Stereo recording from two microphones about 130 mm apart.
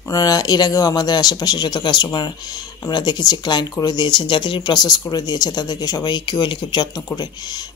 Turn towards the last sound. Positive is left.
turn(degrees=30)  # may be behind; listen again after turning